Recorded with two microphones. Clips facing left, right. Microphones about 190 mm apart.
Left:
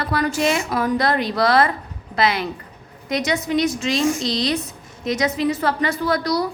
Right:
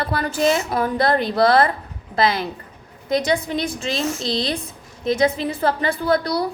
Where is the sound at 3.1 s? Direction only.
30° right (ahead or behind).